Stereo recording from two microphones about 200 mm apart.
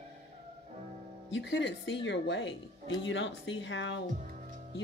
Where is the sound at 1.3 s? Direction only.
65° left (ahead or behind).